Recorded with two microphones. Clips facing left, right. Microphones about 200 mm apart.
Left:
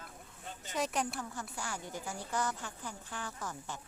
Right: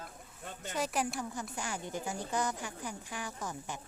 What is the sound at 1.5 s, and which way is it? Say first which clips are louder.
Speech: right 3 dB; 20° right (ahead or behind).